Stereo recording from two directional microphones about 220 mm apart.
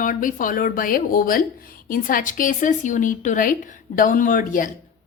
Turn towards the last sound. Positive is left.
turn(degrees=35)  # may be behind; listen again after turning